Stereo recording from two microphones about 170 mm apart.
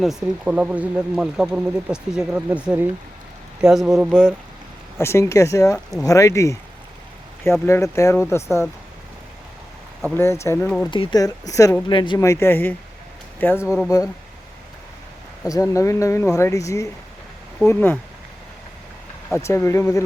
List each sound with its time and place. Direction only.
0.0 s speech: 5° right (ahead or behind)
4.9 s speech: 15° left (ahead or behind)
10.2 s speech: 15° left (ahead or behind)
10.9 s speech: 25° left (ahead or behind)
12.2 s speech: 15° left (ahead or behind)
13.6 s speech: 5° right (ahead or behind)
15.4 s speech: 20° left (ahead or behind)
19.3 s speech: 15° left (ahead or behind)